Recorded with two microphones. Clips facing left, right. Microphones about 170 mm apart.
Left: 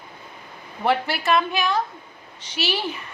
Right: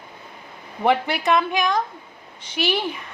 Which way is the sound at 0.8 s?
15° right (ahead or behind).